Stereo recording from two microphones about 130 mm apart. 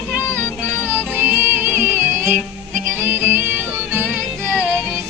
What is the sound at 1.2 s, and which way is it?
Music, 15° right (ahead or behind).